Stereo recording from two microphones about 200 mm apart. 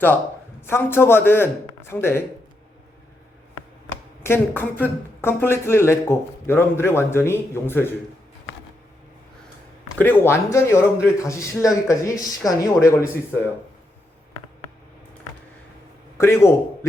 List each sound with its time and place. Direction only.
0.6 s speech: 10° left (ahead or behind)
4.2 s speech: 10° left (ahead or behind)
10.0 s speech: 10° left (ahead or behind)
16.1 s speech: 15° left (ahead or behind)